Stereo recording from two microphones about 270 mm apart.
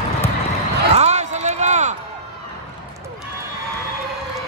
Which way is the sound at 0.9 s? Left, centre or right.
Right.